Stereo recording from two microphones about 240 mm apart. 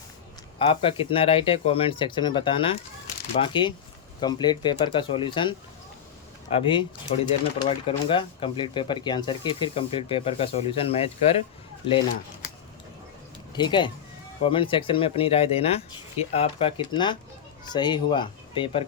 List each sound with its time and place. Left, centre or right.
0.7 s speech: left
6.6 s speech: left
13.6 s speech: centre